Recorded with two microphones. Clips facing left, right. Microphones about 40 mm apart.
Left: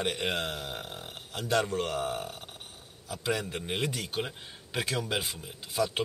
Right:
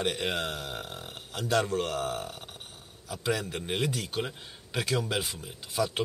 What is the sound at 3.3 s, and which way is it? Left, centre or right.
Speech, centre.